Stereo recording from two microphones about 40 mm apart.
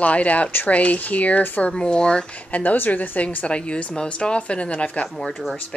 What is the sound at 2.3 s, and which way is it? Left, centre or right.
A woman's voice, left.